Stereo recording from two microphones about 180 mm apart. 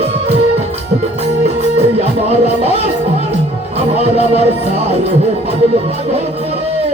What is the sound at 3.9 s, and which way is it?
Music, 35° right (ahead or behind).